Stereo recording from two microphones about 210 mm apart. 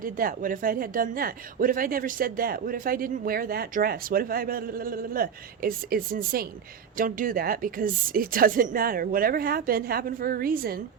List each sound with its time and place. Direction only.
0.0 s speech: 40° right (ahead or behind)